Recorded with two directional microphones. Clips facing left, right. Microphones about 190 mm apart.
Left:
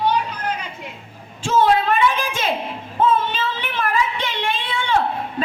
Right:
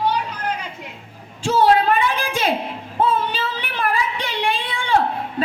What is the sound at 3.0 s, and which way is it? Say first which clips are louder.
Female singing: left 2 dB; 35° right (ahead or behind).